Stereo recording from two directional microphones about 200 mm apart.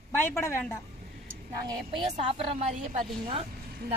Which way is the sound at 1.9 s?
30° right (ahead or behind).